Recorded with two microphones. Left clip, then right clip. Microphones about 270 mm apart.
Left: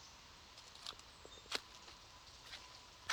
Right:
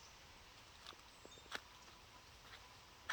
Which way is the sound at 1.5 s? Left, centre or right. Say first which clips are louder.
Left 6 dB; left.